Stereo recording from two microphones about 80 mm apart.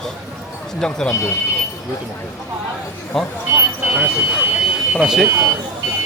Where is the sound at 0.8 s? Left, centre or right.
Centre.